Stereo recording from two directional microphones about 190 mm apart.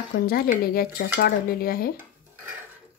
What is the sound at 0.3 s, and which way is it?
Speech, 50° left (ahead or behind).